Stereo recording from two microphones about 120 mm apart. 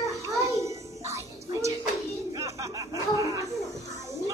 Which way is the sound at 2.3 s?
30° right (ahead or behind).